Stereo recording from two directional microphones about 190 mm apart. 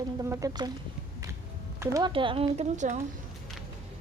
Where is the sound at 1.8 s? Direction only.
20° right (ahead or behind); by 3.0 s 40° right (ahead or behind).